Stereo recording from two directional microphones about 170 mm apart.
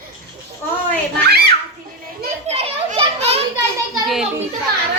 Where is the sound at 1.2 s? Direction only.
65° right (ahead or behind).